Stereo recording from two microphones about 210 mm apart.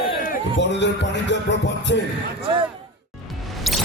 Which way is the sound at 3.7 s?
Centre (ahead or behind).